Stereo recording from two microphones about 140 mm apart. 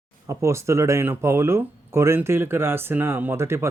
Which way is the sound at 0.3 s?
20° right (ahead or behind).